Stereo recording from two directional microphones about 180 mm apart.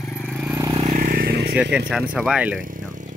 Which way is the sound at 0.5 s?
20° right (ahead or behind).